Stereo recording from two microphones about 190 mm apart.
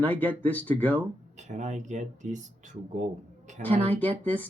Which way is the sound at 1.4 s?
40° right (ahead or behind).